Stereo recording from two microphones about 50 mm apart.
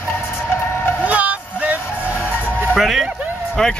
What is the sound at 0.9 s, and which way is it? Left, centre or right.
Music, right.